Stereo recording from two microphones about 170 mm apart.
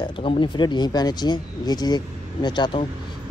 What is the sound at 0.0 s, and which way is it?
Speech, 30° left (ahead or behind).